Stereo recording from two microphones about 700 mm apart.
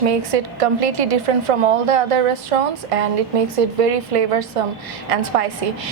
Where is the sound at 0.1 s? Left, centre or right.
Right.